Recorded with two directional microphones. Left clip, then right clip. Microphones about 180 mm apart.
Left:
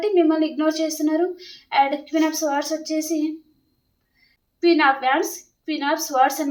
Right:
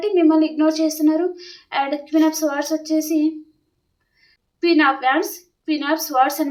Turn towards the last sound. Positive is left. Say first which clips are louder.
# right 1 dB
turn(degrees=-20)  # may be behind; listen again after turning